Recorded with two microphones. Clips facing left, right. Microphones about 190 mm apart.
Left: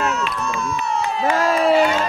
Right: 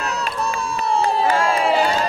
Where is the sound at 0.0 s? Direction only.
35° right (ahead or behind).